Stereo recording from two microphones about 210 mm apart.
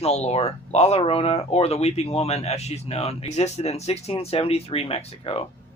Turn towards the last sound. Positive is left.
turn(degrees=25)  # may be behind; listen again after turning